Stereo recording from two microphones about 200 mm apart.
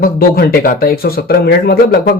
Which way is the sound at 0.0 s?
50° left (ahead or behind).